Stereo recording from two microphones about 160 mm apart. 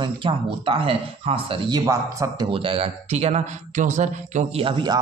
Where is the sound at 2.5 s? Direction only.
35° right (ahead or behind).